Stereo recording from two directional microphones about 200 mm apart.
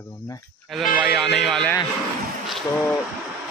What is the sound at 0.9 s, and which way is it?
Speech, centre (ahead or behind).